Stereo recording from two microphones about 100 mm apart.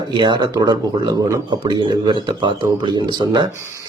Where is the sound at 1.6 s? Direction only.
50° right (ahead or behind).